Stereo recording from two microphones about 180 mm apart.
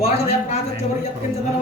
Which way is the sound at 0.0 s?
35° left (ahead or behind).